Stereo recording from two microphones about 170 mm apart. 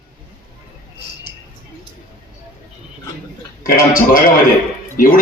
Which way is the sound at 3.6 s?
55° left (ahead or behind).